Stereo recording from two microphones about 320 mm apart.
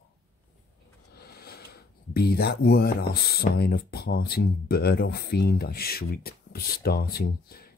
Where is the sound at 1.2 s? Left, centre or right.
Left.